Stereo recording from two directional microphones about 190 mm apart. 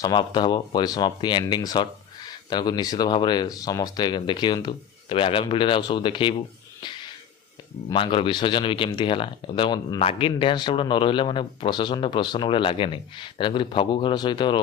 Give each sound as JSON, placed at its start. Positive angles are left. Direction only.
{"t": 0.0, "sound": "speech", "side_deg": 25}
{"t": 7.9, "sound": "speech", "side_deg": 25}